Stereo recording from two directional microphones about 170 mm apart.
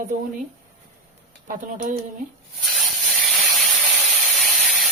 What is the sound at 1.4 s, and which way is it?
Speech, 50° right (ahead or behind).